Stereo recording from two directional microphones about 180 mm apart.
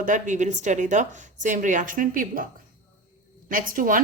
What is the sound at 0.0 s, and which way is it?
Speech, 45° right (ahead or behind).